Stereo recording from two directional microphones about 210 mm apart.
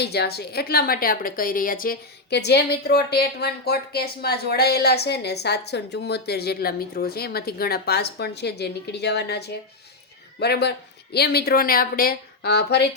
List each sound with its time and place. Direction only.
0.0 s a woman's voice: 50° left (ahead or behind)